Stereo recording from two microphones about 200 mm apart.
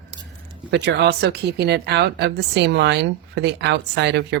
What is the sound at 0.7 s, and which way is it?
Speech, 60° right (ahead or behind).